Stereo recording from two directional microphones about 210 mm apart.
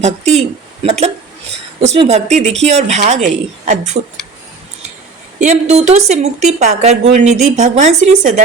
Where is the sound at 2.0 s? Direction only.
30° right (ahead or behind).